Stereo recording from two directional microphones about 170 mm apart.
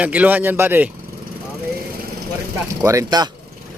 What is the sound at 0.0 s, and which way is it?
Speech, 10° right (ahead or behind).